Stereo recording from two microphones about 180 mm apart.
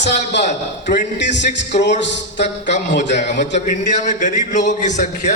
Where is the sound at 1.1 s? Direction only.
75° left (ahead or behind).